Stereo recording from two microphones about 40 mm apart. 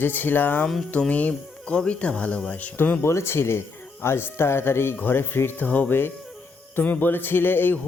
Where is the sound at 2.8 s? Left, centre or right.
Left.